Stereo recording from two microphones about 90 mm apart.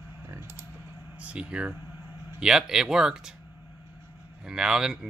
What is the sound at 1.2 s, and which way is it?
Speech, 10° right (ahead or behind).